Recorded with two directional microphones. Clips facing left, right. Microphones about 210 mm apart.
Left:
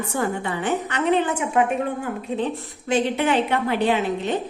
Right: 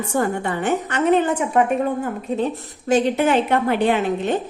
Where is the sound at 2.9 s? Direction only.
40° right (ahead or behind).